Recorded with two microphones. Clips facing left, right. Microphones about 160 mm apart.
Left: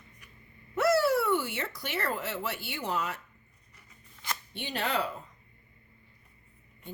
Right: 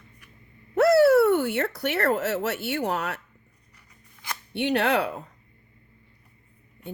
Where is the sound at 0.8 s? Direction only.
65° right (ahead or behind).